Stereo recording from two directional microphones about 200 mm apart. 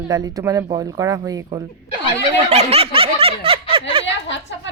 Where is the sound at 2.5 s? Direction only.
30° right (ahead or behind).